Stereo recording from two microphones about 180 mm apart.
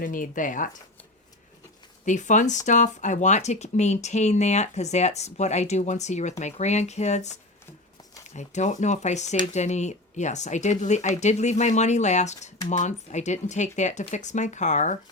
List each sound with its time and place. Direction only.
0.0 s speech: 50° left (ahead or behind)
2.0 s speech: 45° left (ahead or behind)